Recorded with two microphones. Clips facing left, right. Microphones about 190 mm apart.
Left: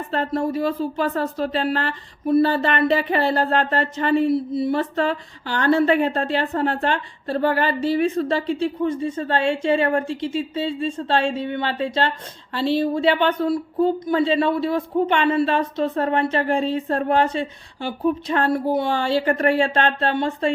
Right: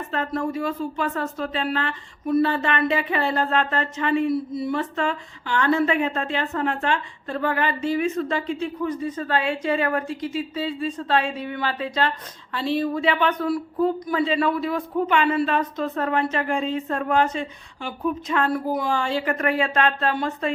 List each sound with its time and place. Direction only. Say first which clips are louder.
0.1 s speech: left 4 dB; 30° left (ahead or behind)